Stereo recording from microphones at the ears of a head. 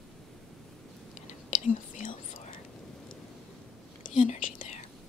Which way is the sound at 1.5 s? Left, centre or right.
Left.